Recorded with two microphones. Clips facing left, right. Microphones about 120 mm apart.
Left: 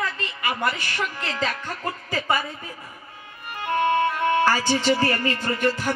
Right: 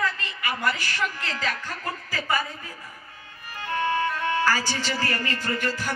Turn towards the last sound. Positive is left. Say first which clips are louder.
# left 5 dB
turn(degrees=30)  # may be behind; listen again after turning